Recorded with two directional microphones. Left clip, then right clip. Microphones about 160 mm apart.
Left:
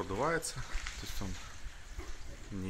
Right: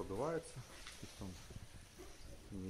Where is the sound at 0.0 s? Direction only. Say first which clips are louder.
Left 8 dB; 20° left (ahead or behind).